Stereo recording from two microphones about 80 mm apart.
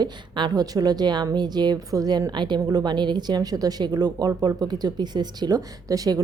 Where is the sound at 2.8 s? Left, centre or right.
Right.